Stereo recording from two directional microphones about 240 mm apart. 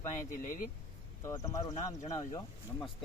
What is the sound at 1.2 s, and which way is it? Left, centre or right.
Speech, centre.